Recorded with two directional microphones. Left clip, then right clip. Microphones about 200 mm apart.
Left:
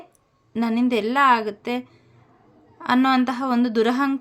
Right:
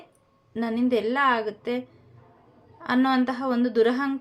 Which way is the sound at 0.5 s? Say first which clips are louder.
Left 2 dB; 35° left (ahead or behind).